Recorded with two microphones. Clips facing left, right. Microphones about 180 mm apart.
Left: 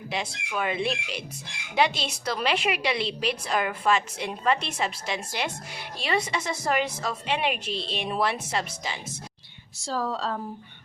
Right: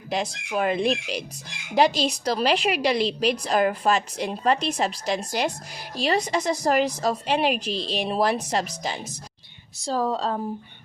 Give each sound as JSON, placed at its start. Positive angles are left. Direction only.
{"t": 0.1, "sound": "a woman's voice", "side_deg": -40}
{"t": 9.8, "sound": "speech", "side_deg": -20}